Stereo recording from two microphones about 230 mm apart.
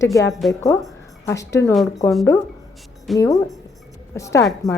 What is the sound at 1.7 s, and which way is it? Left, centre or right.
Speech, centre.